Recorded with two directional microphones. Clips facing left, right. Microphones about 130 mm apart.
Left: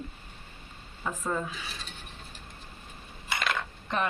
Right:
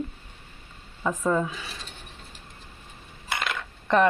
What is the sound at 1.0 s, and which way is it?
Speech, 80° right.